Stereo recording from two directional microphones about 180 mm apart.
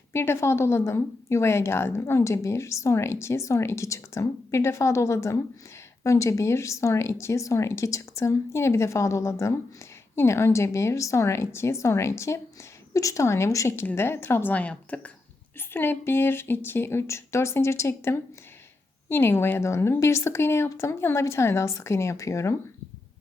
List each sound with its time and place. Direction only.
0.1 s a woman's voice: 15° left (ahead or behind)